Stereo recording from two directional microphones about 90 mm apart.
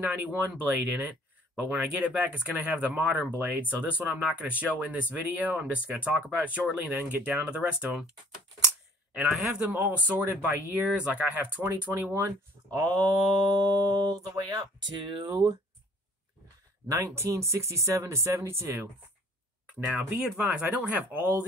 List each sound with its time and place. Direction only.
0.0 s speech: 20° right (ahead or behind)
9.1 s speech: 10° right (ahead or behind)
9.8 s speech: 20° right (ahead or behind)
12.3 s speech: 40° right (ahead or behind)
16.8 s speech: 30° right (ahead or behind)
19.6 s speech: 10° right (ahead or behind)